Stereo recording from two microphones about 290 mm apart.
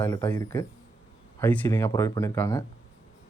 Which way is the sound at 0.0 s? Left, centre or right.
Centre.